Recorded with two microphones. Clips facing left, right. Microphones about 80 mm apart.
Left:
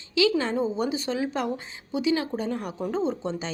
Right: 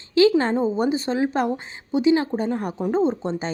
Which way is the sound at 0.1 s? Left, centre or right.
Right.